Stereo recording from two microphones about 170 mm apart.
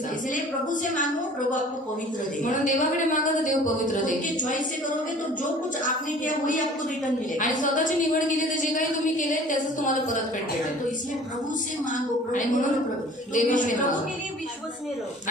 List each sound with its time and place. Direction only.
2.4 s a woman's voice: 50° left (ahead or behind)
5.8 s a woman's voice: 50° left (ahead or behind)
9.1 s a woman's voice: 50° left (ahead or behind)
13.3 s a woman's voice: 50° left (ahead or behind)